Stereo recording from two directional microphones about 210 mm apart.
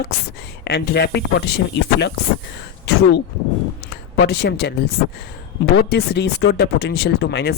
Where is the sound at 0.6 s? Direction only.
50° left (ahead or behind).